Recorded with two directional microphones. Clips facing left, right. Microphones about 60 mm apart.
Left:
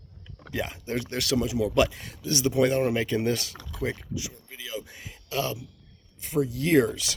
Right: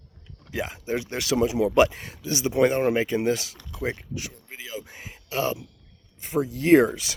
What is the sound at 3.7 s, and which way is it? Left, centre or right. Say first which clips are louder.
Speech: right 1 dB; right.